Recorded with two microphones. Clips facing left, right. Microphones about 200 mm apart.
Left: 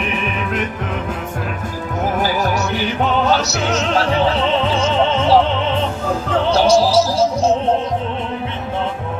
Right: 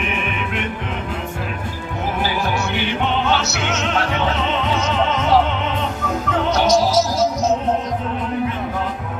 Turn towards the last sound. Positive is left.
turn(degrees=30)  # may be behind; listen again after turning